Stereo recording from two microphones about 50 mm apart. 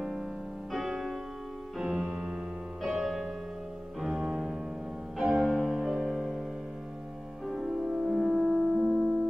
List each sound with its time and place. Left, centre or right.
0.0 s music: centre
0.7 s music: centre
7.4 s music: centre